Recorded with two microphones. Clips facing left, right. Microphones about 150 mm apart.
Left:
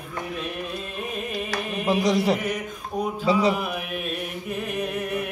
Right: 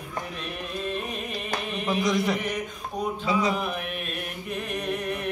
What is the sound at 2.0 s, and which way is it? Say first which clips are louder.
Mantra: left 3 dB; 30° left (ahead or behind).